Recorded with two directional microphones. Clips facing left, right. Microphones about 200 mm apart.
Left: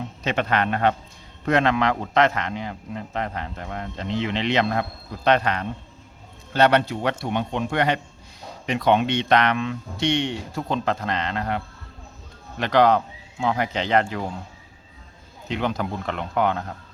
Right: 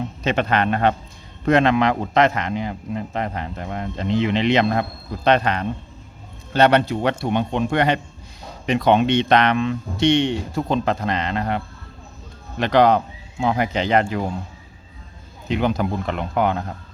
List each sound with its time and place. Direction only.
0.3 s a man's voice: 25° right (ahead or behind); by 14.3 s 10° right (ahead or behind)
15.4 s a man's voice: 10° right (ahead or behind)